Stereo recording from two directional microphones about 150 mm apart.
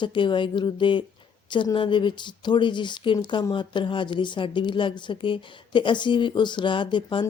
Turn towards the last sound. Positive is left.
turn(degrees=30)  # may be behind; listen again after turning